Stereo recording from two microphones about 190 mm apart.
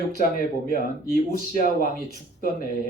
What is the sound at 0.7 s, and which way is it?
Speech, 50° left (ahead or behind).